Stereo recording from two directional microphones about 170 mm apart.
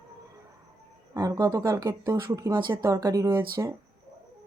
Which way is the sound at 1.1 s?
20° right (ahead or behind).